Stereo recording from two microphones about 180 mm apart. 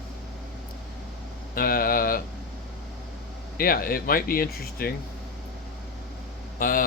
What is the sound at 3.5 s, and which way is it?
Speech, 55° left (ahead or behind).